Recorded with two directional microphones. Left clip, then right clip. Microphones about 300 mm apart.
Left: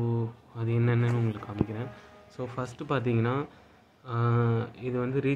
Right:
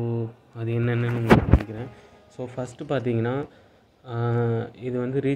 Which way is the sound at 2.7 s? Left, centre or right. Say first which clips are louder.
Right 4 dB; centre.